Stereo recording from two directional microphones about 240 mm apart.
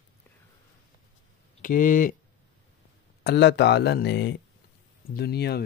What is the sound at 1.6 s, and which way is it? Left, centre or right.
Speech, left.